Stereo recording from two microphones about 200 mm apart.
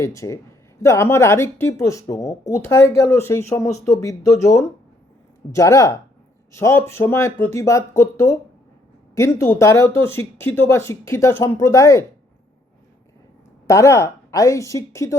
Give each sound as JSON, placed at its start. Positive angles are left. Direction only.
{"t": 0.0, "sound": "speech", "side_deg": 15}
{"t": 13.7, "sound": "speech", "side_deg": 15}